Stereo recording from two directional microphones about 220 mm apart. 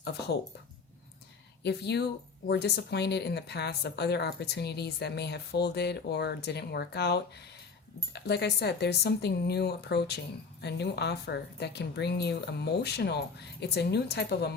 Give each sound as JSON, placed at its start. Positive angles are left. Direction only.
{"t": 0.0, "sound": "speech", "side_deg": 45}
{"t": 1.6, "sound": "speech", "side_deg": 50}